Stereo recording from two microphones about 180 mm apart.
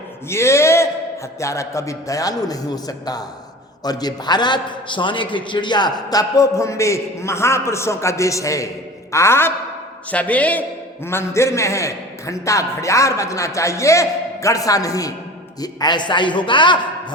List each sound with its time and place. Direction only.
0.3 s a man's voice: 15° left (ahead or behind)